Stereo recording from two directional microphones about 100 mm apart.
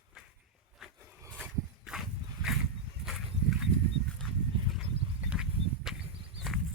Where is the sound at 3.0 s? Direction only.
65° right (ahead or behind).